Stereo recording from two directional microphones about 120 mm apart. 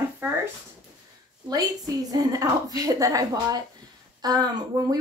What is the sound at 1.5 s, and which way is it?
A woman's voice, 30° right (ahead or behind).